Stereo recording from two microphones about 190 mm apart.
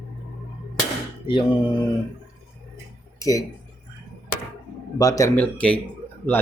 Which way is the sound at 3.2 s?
15° left (ahead or behind).